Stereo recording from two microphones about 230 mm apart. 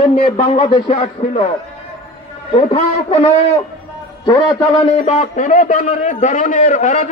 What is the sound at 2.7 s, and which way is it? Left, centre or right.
Speech, left.